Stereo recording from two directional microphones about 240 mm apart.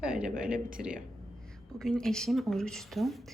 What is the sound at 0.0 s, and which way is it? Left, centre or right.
Speech, centre.